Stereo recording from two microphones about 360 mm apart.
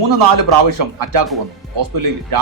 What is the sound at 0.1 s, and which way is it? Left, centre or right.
A man's voice, right.